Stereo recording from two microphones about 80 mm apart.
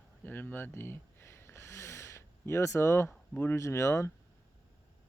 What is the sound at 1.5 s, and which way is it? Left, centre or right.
Snort, left.